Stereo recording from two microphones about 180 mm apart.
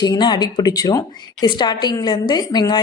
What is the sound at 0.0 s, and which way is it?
A woman's voice, 25° left (ahead or behind).